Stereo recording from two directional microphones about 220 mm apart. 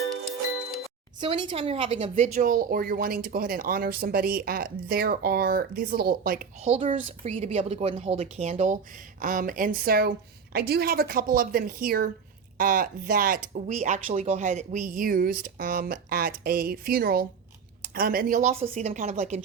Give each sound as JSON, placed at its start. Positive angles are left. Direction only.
{"t": 1.2, "sound": "speech", "side_deg": -20}
{"t": 6.7, "sound": "a woman's voice", "side_deg": -25}